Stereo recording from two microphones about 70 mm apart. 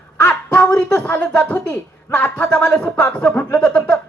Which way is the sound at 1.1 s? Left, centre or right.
Left.